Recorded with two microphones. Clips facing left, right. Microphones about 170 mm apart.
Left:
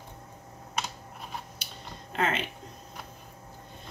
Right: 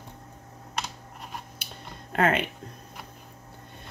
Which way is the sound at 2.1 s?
55° right (ahead or behind).